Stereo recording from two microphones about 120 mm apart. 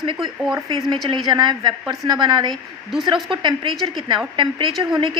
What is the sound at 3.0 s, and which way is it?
A woman's voice, 40° right (ahead or behind).